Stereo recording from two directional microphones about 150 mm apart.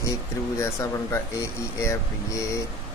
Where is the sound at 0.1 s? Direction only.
20° left (ahead or behind).